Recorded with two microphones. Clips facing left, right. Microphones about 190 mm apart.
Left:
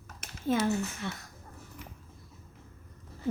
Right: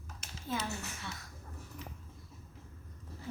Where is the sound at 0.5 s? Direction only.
65° left (ahead or behind).